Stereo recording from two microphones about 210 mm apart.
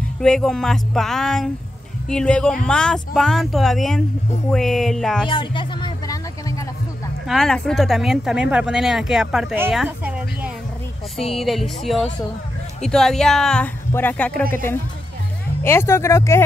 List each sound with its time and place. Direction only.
0.2 s speech: 5° left (ahead or behind)
5.3 s a sound: 25° left (ahead or behind)
7.2 s speech: centre (ahead or behind)